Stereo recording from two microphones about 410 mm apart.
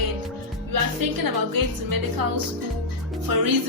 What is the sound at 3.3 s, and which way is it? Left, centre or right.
Music, right.